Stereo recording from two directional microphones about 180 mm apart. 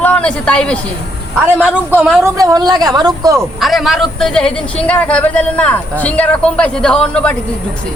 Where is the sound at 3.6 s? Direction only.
Centre (ahead or behind).